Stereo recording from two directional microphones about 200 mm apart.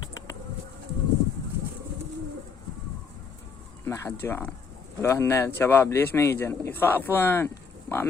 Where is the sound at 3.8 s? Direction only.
15° left (ahead or behind).